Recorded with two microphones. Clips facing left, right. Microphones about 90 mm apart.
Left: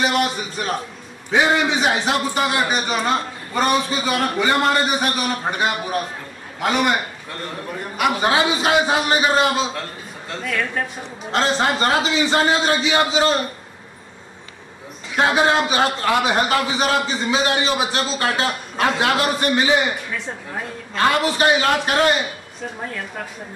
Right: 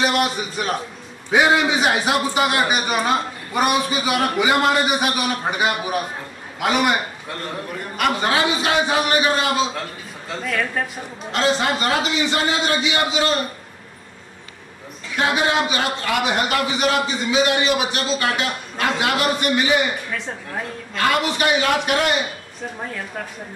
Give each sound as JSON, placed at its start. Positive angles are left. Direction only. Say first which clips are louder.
{"t": 0.0, "sound": "a man's voice", "louder": "even", "side_deg": 0}
{"t": 8.2, "sound": "a man's voice", "louder": "left 2 dB", "side_deg": 20}
{"t": 10.3, "sound": "a man's voice", "louder": "right 1 dB", "side_deg": 0}
{"t": 11.3, "sound": "a man's voice", "louder": "left 1 dB", "side_deg": 30}
{"t": 15.1, "sound": "a man's voice", "louder": "left 3 dB", "side_deg": 30}
{"t": 20.9, "sound": "a man's voice", "louder": "left 2 dB", "side_deg": 30}